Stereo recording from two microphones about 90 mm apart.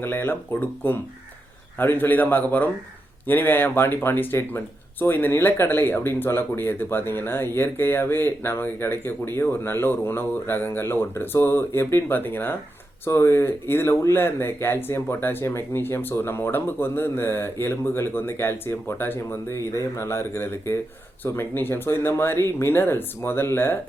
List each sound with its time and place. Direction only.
0.0 s speech: 25° left (ahead or behind)